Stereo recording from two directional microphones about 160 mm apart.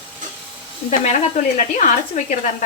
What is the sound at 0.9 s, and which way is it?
Speech, 50° left (ahead or behind).